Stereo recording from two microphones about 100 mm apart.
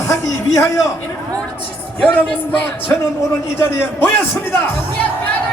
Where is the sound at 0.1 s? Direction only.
30° left (ahead or behind).